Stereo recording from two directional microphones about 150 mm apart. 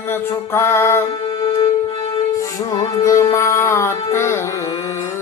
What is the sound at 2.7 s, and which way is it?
Music, 20° left (ahead or behind).